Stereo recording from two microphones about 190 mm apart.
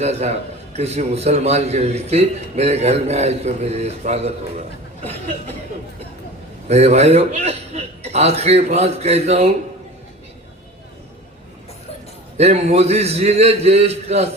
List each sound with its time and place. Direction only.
0.0 s a man's voice: 35° right (ahead or behind)
6.7 s a man's voice: 35° right (ahead or behind)
12.4 s a man's voice: 35° right (ahead or behind)